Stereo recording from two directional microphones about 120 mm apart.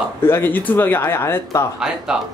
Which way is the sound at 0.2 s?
20° left (ahead or behind).